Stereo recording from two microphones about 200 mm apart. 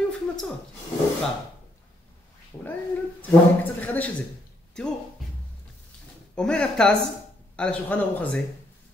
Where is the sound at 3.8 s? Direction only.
10° left (ahead or behind).